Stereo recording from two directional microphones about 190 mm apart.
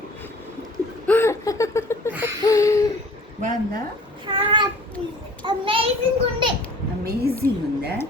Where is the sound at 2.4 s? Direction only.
15° left (ahead or behind).